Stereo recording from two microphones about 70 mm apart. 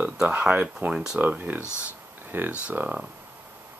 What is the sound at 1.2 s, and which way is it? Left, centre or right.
Speech, right.